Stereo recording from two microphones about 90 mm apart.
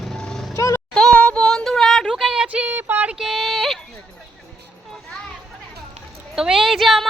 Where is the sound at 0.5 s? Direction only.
35° left (ahead or behind).